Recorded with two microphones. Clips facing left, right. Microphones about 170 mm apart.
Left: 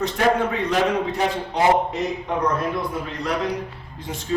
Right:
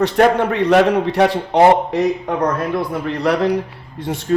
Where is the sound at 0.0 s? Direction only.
65° right (ahead or behind).